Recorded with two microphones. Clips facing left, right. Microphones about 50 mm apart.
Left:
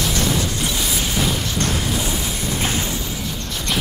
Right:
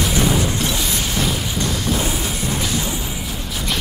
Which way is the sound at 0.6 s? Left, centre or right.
Centre.